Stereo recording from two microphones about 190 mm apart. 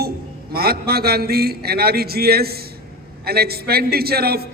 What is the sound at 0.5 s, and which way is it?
A man's voice, 55° right (ahead or behind).